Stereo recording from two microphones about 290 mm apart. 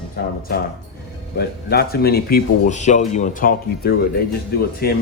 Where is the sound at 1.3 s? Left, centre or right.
Left.